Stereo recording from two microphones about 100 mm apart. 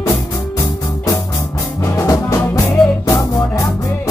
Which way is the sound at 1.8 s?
35° left (ahead or behind).